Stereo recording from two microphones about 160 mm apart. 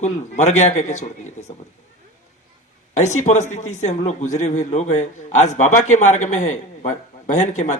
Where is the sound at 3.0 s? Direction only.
45° left (ahead or behind).